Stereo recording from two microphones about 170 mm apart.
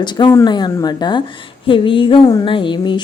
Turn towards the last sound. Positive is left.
turn(degrees=30)  # may be behind; listen again after turning